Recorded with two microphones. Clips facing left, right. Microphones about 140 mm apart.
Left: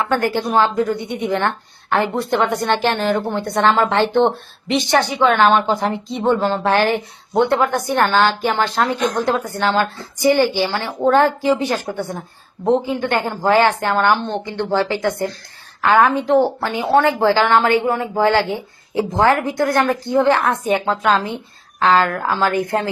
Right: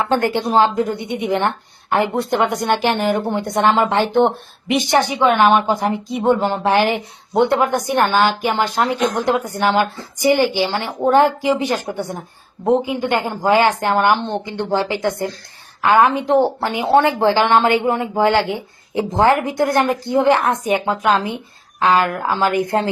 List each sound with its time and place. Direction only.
0.0 s a woman's voice: 15° right (ahead or behind)